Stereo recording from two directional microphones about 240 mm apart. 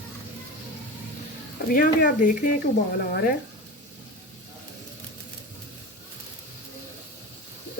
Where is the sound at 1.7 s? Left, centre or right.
Left.